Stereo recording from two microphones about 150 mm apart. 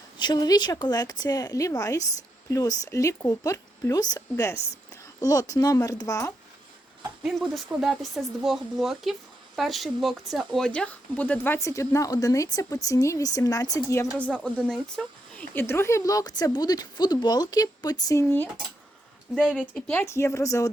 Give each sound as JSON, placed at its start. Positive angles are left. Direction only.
{"t": 0.2, "sound": "speech", "side_deg": 30}
{"t": 7.2, "sound": "speech", "side_deg": 0}
{"t": 14.4, "sound": "speech", "side_deg": 5}
{"t": 19.3, "sound": "speech", "side_deg": -5}
{"t": 19.9, "sound": "speech", "side_deg": 15}